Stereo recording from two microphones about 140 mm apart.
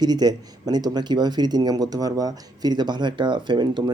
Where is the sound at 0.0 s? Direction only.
30° right (ahead or behind).